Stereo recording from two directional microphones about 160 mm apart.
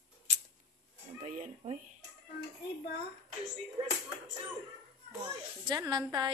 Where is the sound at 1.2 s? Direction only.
50° right (ahead or behind).